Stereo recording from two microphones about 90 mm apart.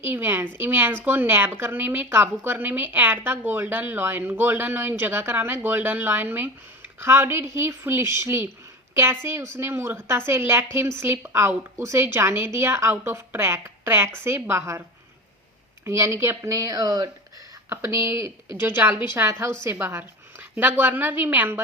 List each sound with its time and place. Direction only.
0.0 s speech: 25° right (ahead or behind); by 17.1 s 40° right (ahead or behind)
17.7 s a woman's voice: 30° right (ahead or behind)